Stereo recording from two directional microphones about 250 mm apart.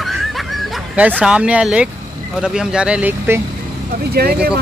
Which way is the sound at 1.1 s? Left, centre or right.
Centre.